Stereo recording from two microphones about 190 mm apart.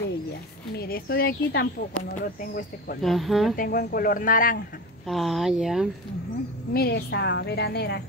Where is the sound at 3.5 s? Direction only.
50° left (ahead or behind).